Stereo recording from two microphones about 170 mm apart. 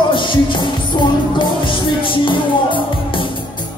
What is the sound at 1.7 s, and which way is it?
Music, 30° left (ahead or behind).